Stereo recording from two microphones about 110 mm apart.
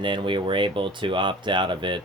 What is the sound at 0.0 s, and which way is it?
Speech, 45° right (ahead or behind).